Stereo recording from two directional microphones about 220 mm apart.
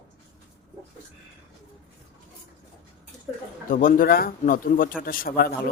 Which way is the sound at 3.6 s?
40° left (ahead or behind).